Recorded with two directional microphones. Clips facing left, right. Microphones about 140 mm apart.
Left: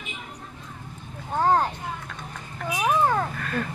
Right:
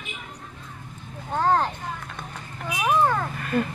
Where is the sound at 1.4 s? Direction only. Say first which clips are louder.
Even; 10° left (ahead or behind).